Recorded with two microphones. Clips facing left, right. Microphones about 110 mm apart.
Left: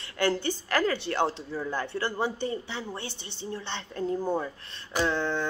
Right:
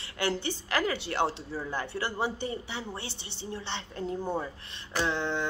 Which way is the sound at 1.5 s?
30° right (ahead or behind).